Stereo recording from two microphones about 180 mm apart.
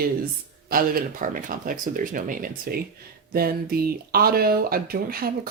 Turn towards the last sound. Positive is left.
turn(degrees=-55)  # may be behind; listen again after turning